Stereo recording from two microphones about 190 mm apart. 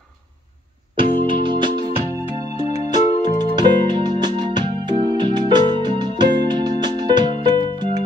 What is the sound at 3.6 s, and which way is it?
Music, 20° right (ahead or behind).